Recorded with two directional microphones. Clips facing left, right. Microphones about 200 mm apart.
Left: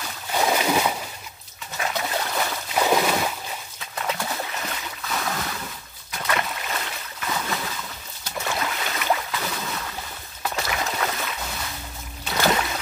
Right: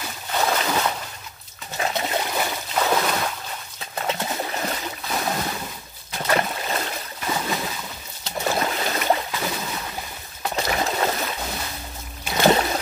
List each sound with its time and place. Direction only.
0.3 s boat: 10° left (ahead or behind)
1.8 s a sound: 25° right (ahead or behind)
2.7 s boat: 10° left (ahead or behind)
3.9 s bird: 25° right (ahead or behind)
4.5 s boat: 35° right (ahead or behind)
7.3 s a sound: 20° right (ahead or behind)
8.2 s boat: 35° right (ahead or behind)
10.5 s boat: 35° right (ahead or behind)
12.4 s trickle: 35° right (ahead or behind)